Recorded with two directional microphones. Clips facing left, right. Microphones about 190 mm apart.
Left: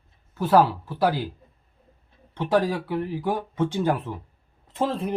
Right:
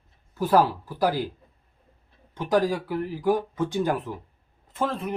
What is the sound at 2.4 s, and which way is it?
Speech, 25° left (ahead or behind).